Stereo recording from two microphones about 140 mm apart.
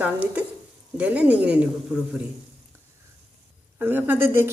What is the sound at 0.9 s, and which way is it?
Speech, 10° right (ahead or behind).